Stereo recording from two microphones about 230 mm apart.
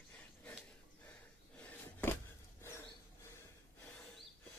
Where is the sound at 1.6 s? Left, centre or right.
Centre.